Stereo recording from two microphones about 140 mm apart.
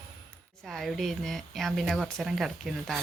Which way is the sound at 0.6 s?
Centre (ahead or behind).